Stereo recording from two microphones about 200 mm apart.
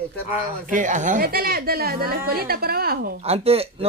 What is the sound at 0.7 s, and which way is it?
Speech, 40° right (ahead or behind).